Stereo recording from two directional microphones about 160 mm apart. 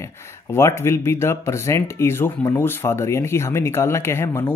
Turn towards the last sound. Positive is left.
turn(degrees=15)  # may be behind; listen again after turning